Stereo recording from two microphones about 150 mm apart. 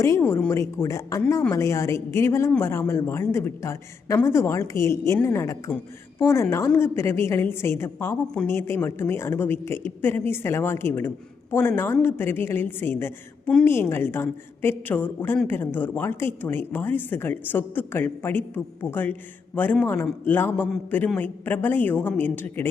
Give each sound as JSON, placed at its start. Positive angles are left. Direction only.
{"t": 0.0, "sound": "a woman's voice", "side_deg": 15}